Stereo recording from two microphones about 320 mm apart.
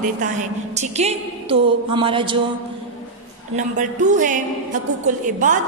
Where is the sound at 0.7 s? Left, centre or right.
Right.